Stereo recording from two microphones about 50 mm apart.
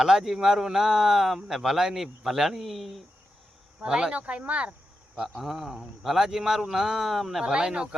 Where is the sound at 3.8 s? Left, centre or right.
Centre.